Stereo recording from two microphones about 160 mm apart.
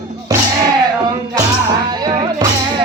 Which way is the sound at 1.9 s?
25° right (ahead or behind).